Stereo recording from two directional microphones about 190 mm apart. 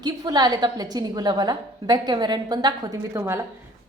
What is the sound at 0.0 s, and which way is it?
A woman's voice, 20° right (ahead or behind).